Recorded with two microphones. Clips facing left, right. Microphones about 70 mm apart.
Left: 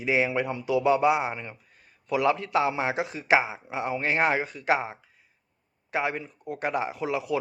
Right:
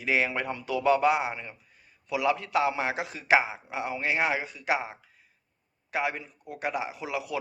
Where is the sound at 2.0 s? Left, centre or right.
Left.